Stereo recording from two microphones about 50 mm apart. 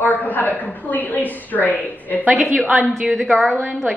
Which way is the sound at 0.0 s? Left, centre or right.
Left.